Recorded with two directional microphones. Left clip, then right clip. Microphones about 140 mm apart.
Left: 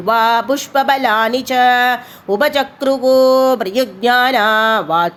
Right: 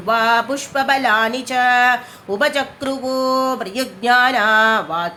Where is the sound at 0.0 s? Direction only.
40° left (ahead or behind).